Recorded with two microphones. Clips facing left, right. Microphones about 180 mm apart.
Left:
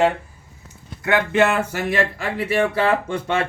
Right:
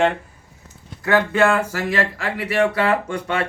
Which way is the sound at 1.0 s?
20° left (ahead or behind).